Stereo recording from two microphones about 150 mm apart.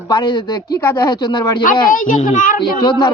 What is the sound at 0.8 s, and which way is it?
Speech, 20° left (ahead or behind).